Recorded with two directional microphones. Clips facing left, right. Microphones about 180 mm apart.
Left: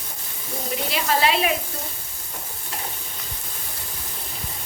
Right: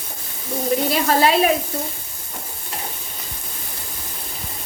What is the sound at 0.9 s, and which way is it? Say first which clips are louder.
Speech: right 3 dB; 40° right (ahead or behind).